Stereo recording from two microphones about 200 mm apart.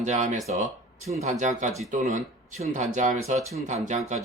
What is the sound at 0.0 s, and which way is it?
Speech, 35° right (ahead or behind).